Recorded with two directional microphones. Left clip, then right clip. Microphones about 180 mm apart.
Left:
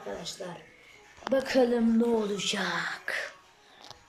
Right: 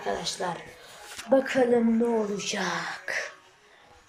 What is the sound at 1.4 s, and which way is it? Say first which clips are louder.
Speech: even; 30° left (ahead or behind).